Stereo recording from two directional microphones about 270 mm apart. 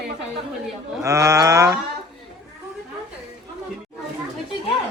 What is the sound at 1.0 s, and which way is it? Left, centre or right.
Speech, centre.